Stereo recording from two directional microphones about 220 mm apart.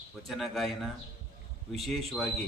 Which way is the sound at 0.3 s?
Centre (ahead or behind).